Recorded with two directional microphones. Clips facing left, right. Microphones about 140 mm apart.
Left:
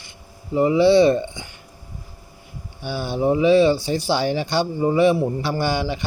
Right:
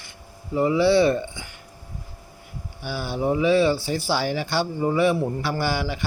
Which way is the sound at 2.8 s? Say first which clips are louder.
Left 4 dB; 20° left (ahead or behind).